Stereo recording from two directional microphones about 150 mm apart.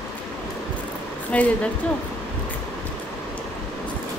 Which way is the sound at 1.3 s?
10° left (ahead or behind).